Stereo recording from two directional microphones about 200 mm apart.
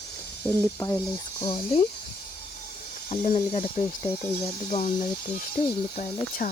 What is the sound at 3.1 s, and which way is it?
Speech, 25° left (ahead or behind).